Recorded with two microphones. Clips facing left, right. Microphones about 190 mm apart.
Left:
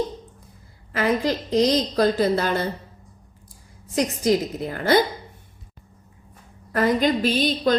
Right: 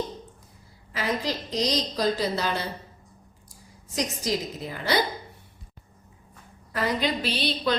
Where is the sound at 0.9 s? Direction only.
55° left (ahead or behind).